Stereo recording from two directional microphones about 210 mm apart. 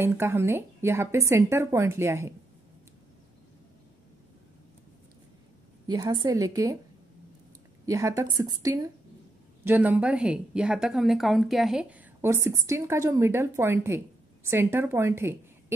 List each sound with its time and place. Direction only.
0.0 s a woman's voice: 10° right (ahead or behind)
5.9 s a woman's voice: 20° right (ahead or behind)
7.8 s a woman's voice: 15° right (ahead or behind)